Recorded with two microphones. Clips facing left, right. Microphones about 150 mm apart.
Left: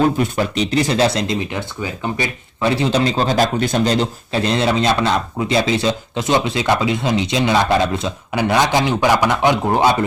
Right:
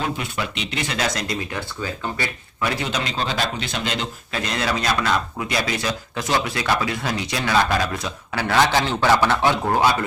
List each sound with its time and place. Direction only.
0.0 s speech: 40° left (ahead or behind); by 10.0 s 20° left (ahead or behind)